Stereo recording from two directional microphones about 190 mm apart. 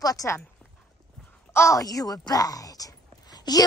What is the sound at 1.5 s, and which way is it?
Speech, 15° left (ahead or behind).